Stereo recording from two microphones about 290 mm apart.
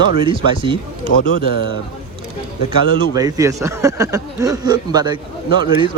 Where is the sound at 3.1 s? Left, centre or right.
Centre.